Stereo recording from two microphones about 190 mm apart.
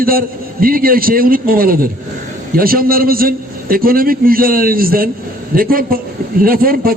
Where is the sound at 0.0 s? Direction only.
50° right (ahead or behind).